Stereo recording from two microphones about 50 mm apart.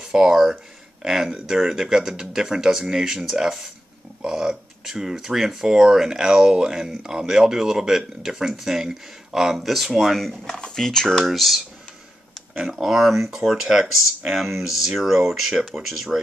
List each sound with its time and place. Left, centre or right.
0.0 s speech: centre
10.4 s speech: centre
11.2 s speech: centre
12.6 s speech: centre